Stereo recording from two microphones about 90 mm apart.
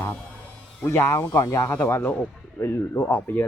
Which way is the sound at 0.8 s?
30° left (ahead or behind).